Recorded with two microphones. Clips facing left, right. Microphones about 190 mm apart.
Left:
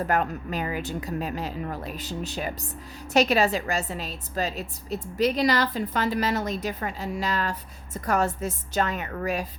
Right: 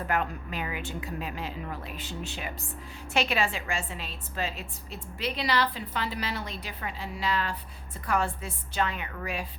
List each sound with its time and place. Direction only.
0.0 s a woman's voice: 40° left (ahead or behind)